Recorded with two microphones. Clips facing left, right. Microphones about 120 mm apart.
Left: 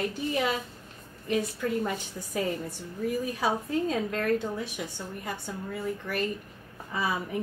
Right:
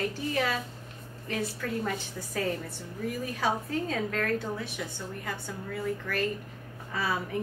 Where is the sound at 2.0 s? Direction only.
15° left (ahead or behind).